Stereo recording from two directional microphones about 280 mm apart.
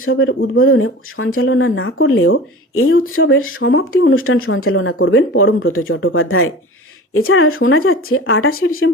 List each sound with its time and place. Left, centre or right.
0.0 s speech: left